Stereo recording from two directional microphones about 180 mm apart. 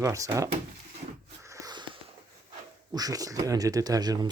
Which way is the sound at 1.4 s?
20° right (ahead or behind).